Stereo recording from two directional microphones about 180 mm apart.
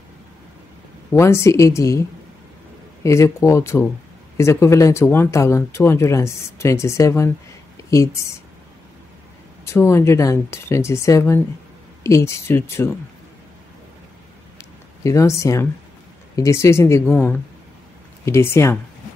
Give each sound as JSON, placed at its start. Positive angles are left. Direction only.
{"t": 1.1, "sound": "speech", "side_deg": 15}
{"t": 3.0, "sound": "speech", "side_deg": 15}
{"t": 9.7, "sound": "speech", "side_deg": 15}
{"t": 14.6, "sound": "a sound", "side_deg": 15}
{"t": 16.3, "sound": "speech", "side_deg": 15}